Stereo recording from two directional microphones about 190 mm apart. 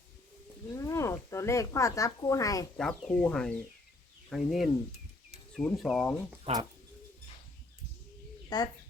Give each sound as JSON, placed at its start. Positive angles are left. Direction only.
{"t": 0.7, "sound": "speech", "side_deg": 15}
{"t": 2.7, "sound": "speech", "side_deg": 5}
{"t": 6.4, "sound": "speech", "side_deg": -30}
{"t": 8.4, "sound": "speech", "side_deg": 20}